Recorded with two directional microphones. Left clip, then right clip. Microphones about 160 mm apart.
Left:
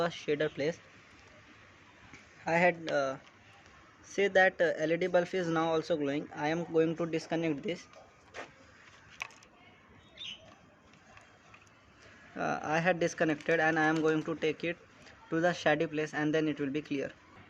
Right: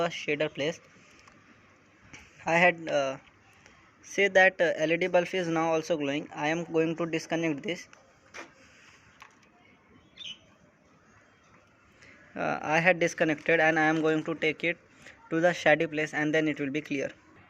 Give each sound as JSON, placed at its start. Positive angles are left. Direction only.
{"t": 0.0, "sound": "speech", "side_deg": -10}
{"t": 2.1, "sound": "speech", "side_deg": -20}
{"t": 12.3, "sound": "speech", "side_deg": -15}